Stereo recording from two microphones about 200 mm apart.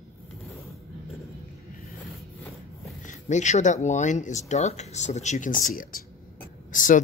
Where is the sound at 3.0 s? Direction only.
40° left (ahead or behind).